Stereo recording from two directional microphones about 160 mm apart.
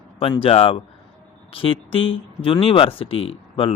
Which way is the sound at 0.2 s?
35° left (ahead or behind).